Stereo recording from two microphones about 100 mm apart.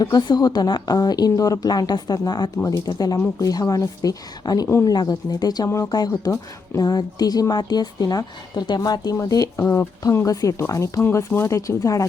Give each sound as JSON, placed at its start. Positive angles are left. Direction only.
{"t": 0.0, "sound": "a woman's voice", "side_deg": 45}
{"t": 5.6, "sound": "speech", "side_deg": 30}
{"t": 5.9, "sound": "a woman's voice", "side_deg": 40}
{"t": 9.1, "sound": "a woman's voice", "side_deg": 30}